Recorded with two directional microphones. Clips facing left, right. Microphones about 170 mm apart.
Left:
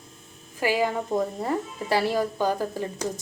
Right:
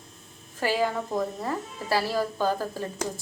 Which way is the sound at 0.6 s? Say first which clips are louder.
Left 2 dB; 15° left (ahead or behind).